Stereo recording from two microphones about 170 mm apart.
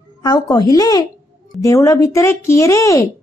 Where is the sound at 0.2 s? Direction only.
25° left (ahead or behind).